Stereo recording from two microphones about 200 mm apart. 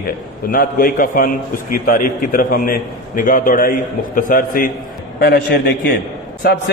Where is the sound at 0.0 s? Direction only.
45° left (ahead or behind).